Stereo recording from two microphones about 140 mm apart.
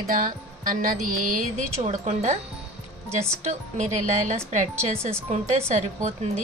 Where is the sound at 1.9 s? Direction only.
50° right (ahead or behind).